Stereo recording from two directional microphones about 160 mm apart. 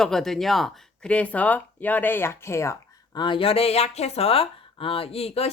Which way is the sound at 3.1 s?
30° left (ahead or behind).